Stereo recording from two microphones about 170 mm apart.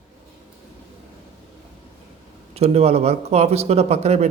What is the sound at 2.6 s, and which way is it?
Speech, 40° right (ahead or behind).